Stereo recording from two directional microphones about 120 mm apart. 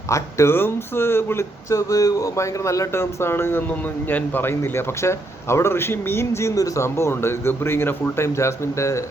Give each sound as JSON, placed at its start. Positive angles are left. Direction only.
{"t": 0.1, "sound": "speech", "side_deg": 20}